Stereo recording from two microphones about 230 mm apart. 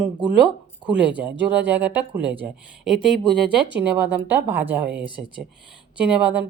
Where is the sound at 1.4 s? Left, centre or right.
Right.